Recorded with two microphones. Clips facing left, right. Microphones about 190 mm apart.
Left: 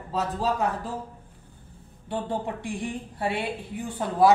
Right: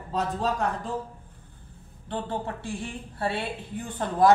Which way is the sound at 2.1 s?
15° left (ahead or behind).